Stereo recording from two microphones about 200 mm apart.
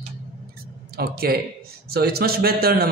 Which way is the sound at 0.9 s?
50° right (ahead or behind).